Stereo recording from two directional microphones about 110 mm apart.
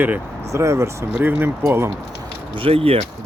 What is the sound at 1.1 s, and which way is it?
Speech, 15° right (ahead or behind).